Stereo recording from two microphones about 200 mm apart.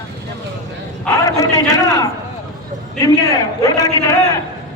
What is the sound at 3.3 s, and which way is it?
Speech, 15° left (ahead or behind).